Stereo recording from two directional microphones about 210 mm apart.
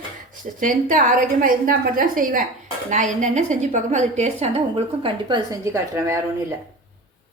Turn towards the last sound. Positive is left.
turn(degrees=-15)  # may be behind; listen again after turning